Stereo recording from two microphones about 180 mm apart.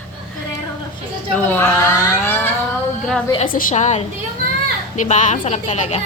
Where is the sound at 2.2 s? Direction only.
10° left (ahead or behind).